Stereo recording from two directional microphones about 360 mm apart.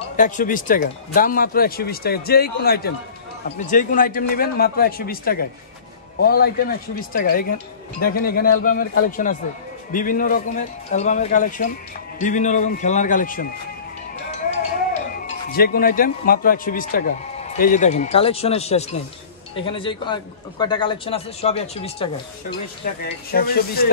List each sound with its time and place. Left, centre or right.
0.1 s speech: left
14.5 s a man's voice: left
23.0 s speech: left